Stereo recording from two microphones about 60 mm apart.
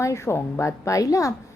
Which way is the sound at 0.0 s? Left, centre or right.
Left.